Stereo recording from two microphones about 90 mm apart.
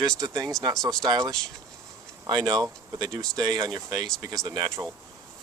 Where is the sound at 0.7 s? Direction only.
5° left (ahead or behind).